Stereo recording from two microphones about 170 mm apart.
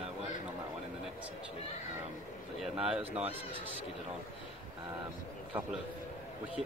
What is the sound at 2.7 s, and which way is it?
Speech, 5° right (ahead or behind).